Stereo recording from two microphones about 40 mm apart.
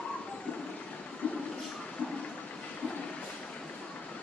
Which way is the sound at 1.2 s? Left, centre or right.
Left.